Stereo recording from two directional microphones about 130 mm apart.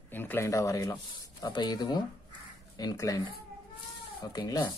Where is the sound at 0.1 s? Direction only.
15° left (ahead or behind).